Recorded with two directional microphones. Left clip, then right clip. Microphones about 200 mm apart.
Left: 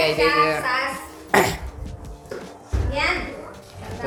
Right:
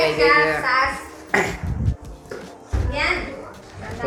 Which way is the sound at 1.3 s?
15° left (ahead or behind).